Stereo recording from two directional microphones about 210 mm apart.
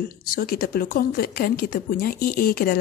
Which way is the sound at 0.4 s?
45° left (ahead or behind).